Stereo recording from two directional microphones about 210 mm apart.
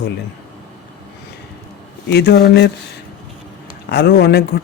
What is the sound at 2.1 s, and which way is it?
Speech, 50° left (ahead or behind).